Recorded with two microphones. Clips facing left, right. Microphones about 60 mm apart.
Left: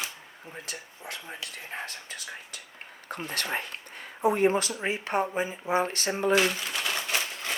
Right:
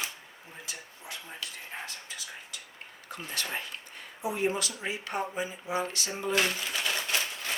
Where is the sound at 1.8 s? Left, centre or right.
Left.